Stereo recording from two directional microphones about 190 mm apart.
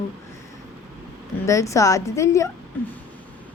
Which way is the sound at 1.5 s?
15° left (ahead or behind).